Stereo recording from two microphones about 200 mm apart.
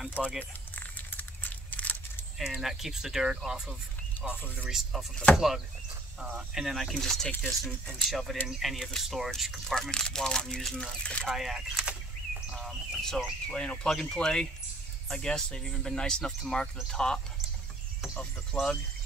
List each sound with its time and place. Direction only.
0.2 s speech: centre (ahead or behind)
0.7 s a sound: 10° left (ahead or behind)
4.4 s speech: 10° left (ahead or behind)